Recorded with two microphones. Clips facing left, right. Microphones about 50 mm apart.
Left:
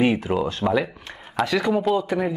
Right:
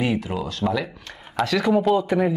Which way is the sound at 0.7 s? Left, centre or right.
Centre.